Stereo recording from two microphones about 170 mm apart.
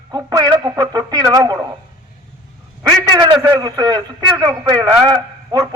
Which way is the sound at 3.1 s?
25° right (ahead or behind).